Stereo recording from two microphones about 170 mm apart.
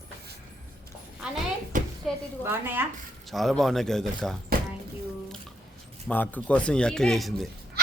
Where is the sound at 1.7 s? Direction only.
50° right (ahead or behind).